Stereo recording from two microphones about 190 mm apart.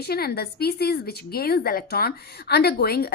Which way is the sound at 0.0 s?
55° left (ahead or behind).